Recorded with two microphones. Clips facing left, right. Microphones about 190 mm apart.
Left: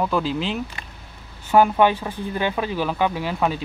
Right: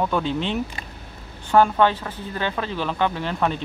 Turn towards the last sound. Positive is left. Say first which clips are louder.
# left 1 dB
turn(degrees=10)  # may be behind; listen again after turning